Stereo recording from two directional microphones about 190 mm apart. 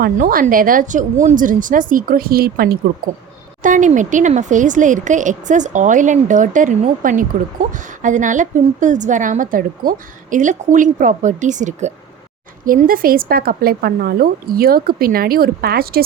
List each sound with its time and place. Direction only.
0.0 s a woman's voice: 50° right (ahead or behind)
3.6 s a woman's voice: 40° right (ahead or behind)